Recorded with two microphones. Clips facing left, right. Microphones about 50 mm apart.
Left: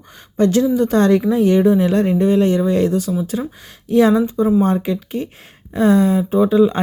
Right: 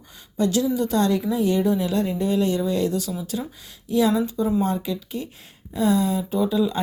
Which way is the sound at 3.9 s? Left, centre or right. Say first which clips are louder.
Left 7 dB; left.